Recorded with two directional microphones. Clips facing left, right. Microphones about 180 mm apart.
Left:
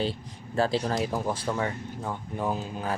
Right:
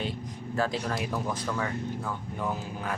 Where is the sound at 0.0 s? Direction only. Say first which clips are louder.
Left 3 dB; 30° left (ahead or behind).